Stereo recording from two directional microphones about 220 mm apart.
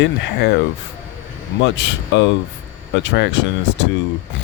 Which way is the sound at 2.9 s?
55° left (ahead or behind).